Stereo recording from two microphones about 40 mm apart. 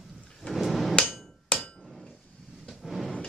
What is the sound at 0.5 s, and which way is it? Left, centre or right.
Hammer, centre.